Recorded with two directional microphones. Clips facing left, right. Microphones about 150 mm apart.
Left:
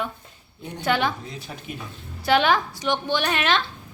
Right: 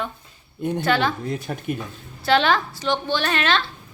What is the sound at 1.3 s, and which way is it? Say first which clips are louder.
Speech: right 9 dB; 55° right (ahead or behind).